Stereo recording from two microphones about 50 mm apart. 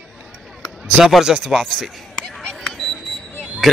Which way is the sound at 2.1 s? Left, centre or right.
Centre.